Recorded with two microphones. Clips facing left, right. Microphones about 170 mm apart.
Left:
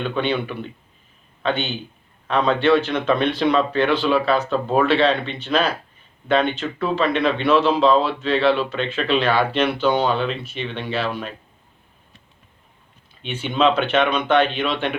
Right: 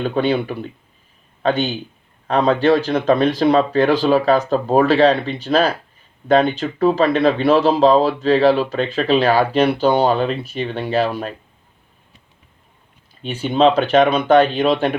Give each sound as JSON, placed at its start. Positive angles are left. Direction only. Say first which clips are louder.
{"t": 0.0, "sound": "speech", "louder": "right 4 dB", "side_deg": -40}
{"t": 13.2, "sound": "speech", "louder": "right 4 dB", "side_deg": -40}